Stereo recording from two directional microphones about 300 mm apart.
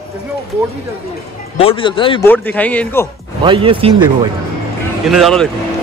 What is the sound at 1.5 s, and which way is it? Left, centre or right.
Speech, centre.